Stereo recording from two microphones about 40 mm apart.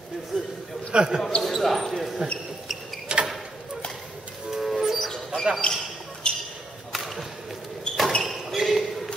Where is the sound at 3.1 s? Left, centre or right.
Right.